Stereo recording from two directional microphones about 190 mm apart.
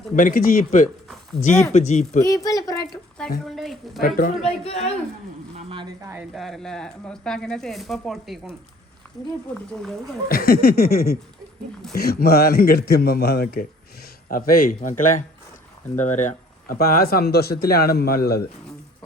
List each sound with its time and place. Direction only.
0.2 s a woman's voice: 45° left (ahead or behind)
2.2 s a woman's voice: 20° left (ahead or behind)
3.4 s speech: centre (ahead or behind)
4.0 s speech: 50° left (ahead or behind)
4.4 s a woman's voice: 30° left (ahead or behind)
5.5 s a woman's voice: 30° right (ahead or behind)
6.3 s speech: centre (ahead or behind)
9.0 s a sound: 10° left (ahead or behind)
10.2 s a man's voice: 50° left (ahead or behind)